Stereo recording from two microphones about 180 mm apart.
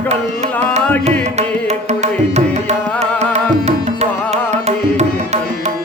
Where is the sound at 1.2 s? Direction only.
40° right (ahead or behind).